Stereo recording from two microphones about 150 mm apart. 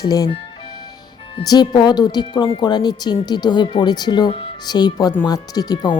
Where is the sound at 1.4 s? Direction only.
30° left (ahead or behind).